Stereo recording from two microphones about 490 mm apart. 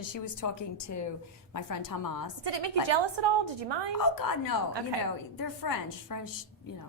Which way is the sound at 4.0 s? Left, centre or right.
Left.